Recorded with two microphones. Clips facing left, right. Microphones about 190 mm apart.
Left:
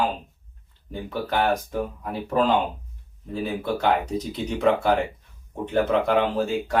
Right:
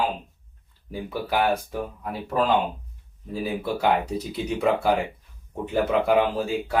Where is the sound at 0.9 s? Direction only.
10° right (ahead or behind).